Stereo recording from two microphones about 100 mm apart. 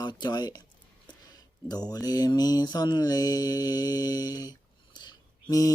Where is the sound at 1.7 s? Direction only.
40° left (ahead or behind).